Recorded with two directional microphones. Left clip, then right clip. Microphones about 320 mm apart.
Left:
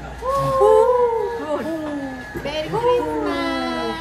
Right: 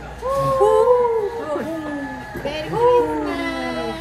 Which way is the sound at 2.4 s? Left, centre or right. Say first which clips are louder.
Right 2 dB; centre.